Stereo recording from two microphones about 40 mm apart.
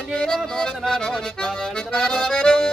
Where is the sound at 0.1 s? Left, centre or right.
Left.